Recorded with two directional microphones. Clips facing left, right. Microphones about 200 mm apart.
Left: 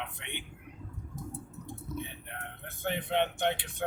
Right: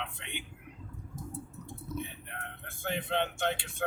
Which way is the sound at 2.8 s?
20° left (ahead or behind).